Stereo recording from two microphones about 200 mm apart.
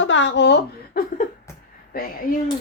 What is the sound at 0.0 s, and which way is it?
A woman's voice, 70° left (ahead or behind).